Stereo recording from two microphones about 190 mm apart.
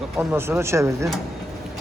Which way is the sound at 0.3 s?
15° right (ahead or behind).